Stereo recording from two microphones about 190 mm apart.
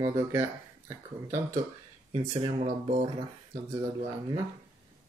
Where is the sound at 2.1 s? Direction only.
30° right (ahead or behind).